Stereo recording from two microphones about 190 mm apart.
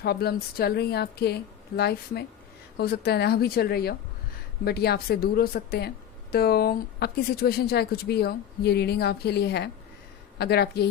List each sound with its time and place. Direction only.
0.0 s speech: 55° left (ahead or behind)